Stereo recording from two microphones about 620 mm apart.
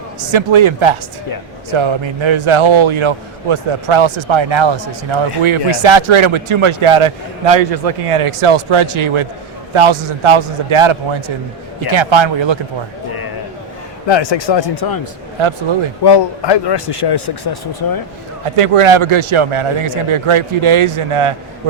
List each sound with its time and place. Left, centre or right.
0.2 s speech: right
14.1 s speech: left
15.4 s speech: right
16.0 s speech: left
18.4 s speech: right